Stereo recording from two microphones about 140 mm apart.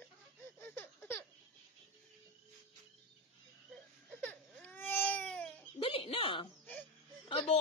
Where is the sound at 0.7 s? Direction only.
15° left (ahead or behind).